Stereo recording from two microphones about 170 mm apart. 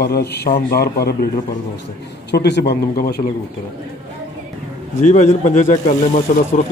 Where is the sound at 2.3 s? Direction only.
75° left (ahead or behind).